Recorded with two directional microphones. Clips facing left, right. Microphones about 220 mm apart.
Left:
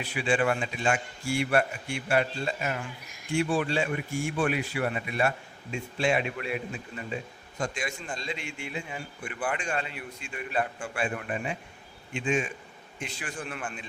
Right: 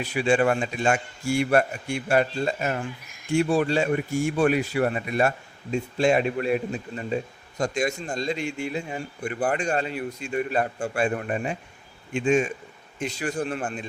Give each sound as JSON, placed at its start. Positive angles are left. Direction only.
{"t": 0.0, "sound": "a man's voice", "side_deg": -40}